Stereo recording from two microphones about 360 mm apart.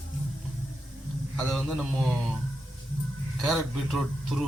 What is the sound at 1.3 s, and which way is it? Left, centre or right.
Speech, centre.